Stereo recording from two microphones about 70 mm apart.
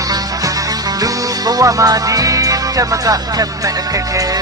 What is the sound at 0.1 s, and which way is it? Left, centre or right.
Music, right.